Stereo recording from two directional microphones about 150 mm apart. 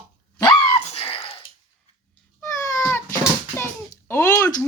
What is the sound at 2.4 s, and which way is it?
Cat, 15° left (ahead or behind).